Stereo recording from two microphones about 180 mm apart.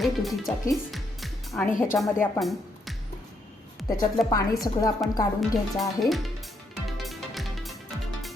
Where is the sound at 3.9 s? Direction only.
20° left (ahead or behind).